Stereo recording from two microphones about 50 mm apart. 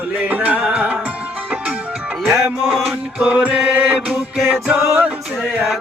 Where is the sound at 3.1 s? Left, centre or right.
Right.